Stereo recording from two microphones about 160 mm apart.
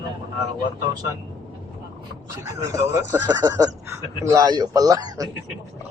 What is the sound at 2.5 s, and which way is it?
Speech, 20° right (ahead or behind).